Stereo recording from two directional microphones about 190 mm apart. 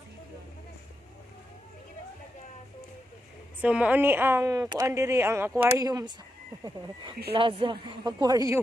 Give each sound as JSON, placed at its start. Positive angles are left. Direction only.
{"t": 3.6, "sound": "a woman's voice", "side_deg": -5}